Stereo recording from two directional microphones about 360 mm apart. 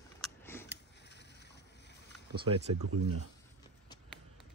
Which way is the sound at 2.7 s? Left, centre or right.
Right.